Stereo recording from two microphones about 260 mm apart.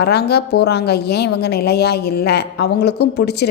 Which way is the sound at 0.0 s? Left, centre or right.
Left.